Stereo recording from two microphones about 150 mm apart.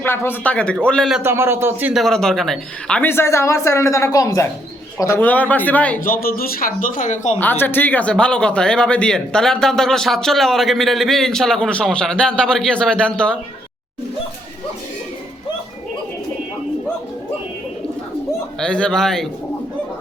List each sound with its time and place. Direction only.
0.0 s speech: 15° left (ahead or behind)
1.2 s speech: 15° right (ahead or behind)
1.9 s speech: centre (ahead or behind)
6.0 s speech: 75° left (ahead or behind); by 7.3 s 55° left (ahead or behind)
7.3 s speech: 15° left (ahead or behind)
18.6 s speech: 5° left (ahead or behind)